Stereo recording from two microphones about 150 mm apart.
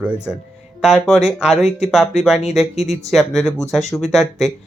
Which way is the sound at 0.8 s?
Centre (ahead or behind).